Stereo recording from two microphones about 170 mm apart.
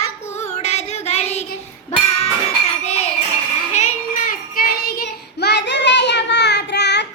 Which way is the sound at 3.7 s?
50° left (ahead or behind).